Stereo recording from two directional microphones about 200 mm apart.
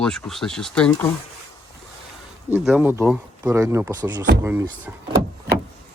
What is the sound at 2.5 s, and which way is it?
Speech, 5° right (ahead or behind).